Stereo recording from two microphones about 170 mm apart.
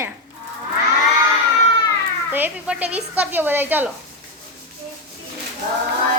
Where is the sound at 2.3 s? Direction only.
10° right (ahead or behind).